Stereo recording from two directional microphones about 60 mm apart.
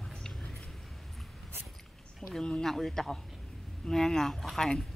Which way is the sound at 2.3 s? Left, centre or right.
Centre.